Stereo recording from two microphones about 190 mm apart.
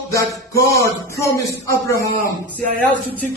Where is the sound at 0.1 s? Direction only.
15° left (ahead or behind).